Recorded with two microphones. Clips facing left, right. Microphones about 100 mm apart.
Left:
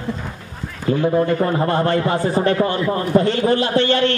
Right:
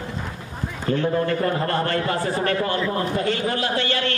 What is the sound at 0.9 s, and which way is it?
A man's voice, 10° left (ahead or behind).